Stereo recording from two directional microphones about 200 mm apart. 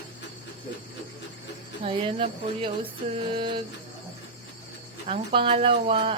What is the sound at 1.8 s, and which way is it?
A woman's voice, 25° right (ahead or behind).